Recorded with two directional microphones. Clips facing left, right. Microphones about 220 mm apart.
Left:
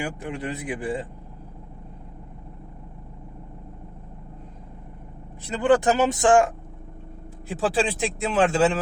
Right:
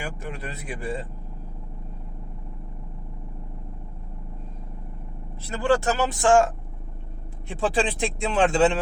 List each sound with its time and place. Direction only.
0.0 s a man's voice: 15° left (ahead or behind)
5.4 s speech: 20° left (ahead or behind)
7.4 s speech: centre (ahead or behind)